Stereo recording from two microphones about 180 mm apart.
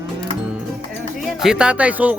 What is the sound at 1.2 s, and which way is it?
Speech, centre (ahead or behind).